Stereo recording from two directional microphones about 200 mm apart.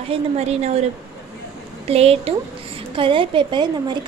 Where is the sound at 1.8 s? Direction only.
30° right (ahead or behind).